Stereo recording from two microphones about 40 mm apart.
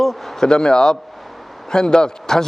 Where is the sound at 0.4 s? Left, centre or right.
Centre.